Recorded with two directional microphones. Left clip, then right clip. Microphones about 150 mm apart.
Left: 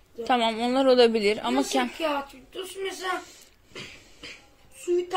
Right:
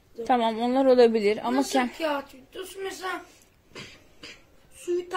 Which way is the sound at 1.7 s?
30° right (ahead or behind).